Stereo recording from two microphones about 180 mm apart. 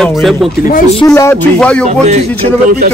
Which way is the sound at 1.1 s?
10° left (ahead or behind).